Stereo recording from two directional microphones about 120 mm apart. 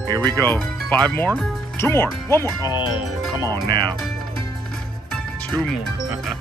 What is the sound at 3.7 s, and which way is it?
Speech, 40° right (ahead or behind).